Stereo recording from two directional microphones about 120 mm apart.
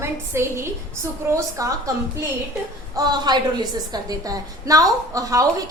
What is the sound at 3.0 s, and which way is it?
A woman's voice, 35° right (ahead or behind).